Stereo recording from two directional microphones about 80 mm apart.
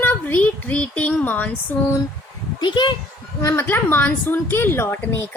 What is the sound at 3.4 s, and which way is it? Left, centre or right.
Speech, left.